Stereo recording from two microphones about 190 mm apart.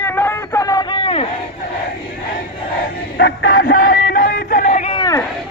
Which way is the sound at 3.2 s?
55° left (ahead or behind).